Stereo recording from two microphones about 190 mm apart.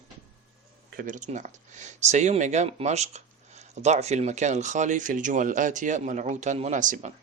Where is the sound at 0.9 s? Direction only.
50° right (ahead or behind).